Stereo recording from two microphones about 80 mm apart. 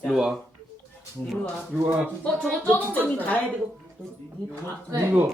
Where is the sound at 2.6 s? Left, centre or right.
Left.